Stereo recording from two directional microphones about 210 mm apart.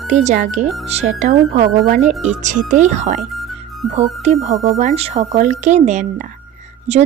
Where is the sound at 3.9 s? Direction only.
30° right (ahead or behind).